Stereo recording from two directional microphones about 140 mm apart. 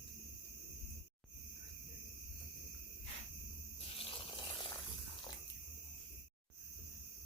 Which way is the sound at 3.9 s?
35° left (ahead or behind).